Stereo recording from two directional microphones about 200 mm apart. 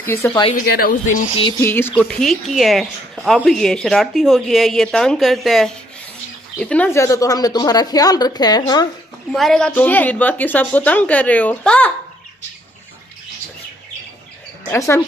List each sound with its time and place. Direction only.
0.0 s a woman's voice: 10° left (ahead or behind)
0.6 s speech: 45° left (ahead or behind)
1.6 s a woman's voice: 10° left (ahead or behind)
9.3 s a woman's voice: centre (ahead or behind)
14.7 s a woman's voice: 10° left (ahead or behind)